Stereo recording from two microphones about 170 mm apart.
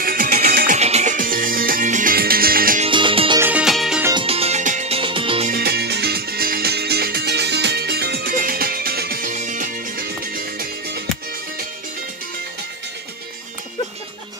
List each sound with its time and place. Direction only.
0.0 s music: 55° right (ahead or behind)
0.7 s music: 40° right (ahead or behind); by 2.8 s 60° right (ahead or behind)
2.8 s music: 30° right (ahead or behind)
3.3 s music: 10° right (ahead or behind)
4.1 s music: 30° right (ahead or behind)
5.5 s music: 70° right (ahead or behind)